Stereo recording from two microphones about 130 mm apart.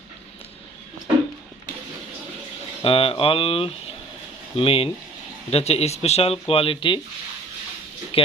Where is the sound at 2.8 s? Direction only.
45° left (ahead or behind).